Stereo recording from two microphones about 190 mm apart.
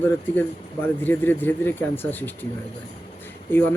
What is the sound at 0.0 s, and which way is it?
Speech, 10° left (ahead or behind).